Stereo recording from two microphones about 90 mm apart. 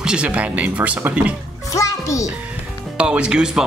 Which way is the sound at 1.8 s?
35° left (ahead or behind).